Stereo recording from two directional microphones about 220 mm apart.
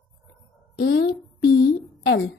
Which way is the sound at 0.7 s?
50° left (ahead or behind).